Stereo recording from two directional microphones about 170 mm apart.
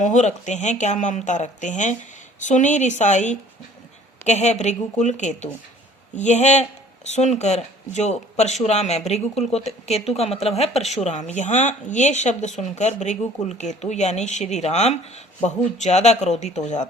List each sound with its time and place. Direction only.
0.0 s speech: 45° left (ahead or behind)